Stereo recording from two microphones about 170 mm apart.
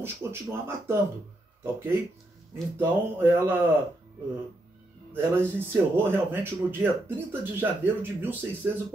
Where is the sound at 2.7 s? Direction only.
10° right (ahead or behind).